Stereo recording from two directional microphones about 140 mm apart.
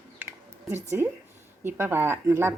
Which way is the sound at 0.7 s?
15° right (ahead or behind).